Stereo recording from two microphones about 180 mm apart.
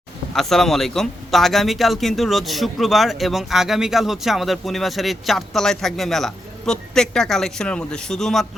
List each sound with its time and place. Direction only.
0.3 s speech: centre (ahead or behind)